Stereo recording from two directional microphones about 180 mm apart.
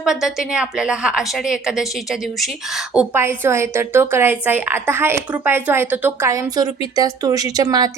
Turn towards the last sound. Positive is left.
turn(degrees=-20)  # may be behind; listen again after turning